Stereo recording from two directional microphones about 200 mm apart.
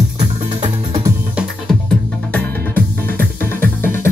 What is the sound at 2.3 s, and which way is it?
Music, 10° left (ahead or behind).